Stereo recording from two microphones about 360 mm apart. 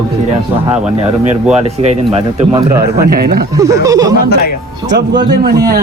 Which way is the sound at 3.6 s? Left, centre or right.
Centre.